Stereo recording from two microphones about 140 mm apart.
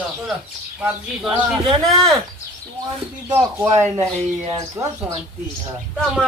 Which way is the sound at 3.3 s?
20° right (ahead or behind).